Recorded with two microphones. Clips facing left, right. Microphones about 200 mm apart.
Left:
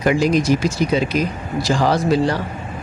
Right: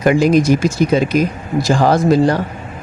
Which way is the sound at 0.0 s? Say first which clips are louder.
Right 4 dB; 55° right (ahead or behind).